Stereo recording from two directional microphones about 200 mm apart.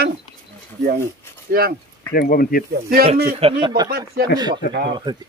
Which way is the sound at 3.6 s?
20° right (ahead or behind).